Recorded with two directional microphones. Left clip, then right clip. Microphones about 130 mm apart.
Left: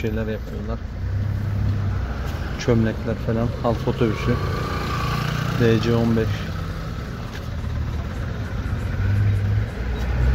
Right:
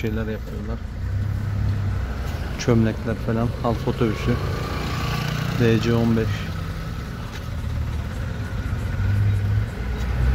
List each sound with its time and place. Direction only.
2.6 s speech: 30° right (ahead or behind)
5.6 s speech: 25° right (ahead or behind)